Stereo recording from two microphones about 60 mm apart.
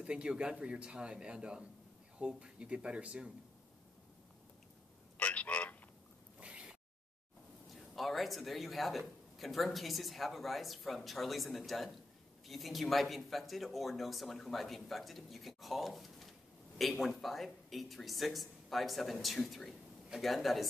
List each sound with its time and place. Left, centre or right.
0.0 s a man's voice: centre
5.1 s telephone: left
6.4 s a sound: centre
7.7 s speech: centre